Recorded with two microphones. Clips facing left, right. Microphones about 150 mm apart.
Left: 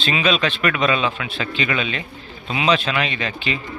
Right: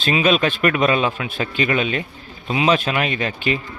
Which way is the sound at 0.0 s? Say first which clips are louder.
Right 3 dB; 45° right (ahead or behind).